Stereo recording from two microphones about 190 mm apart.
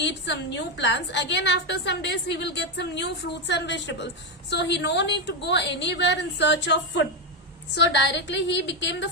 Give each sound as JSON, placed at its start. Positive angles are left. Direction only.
{"t": 0.0, "sound": "a woman's voice", "side_deg": 70}